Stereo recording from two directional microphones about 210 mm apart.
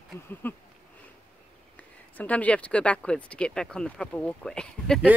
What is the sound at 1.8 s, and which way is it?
Speech, 5° left (ahead or behind).